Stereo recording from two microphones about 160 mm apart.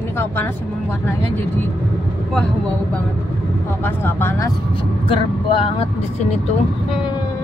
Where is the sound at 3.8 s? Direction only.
15° left (ahead or behind).